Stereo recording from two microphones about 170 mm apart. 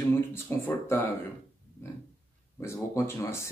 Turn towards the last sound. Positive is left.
turn(degrees=15)  # may be behind; listen again after turning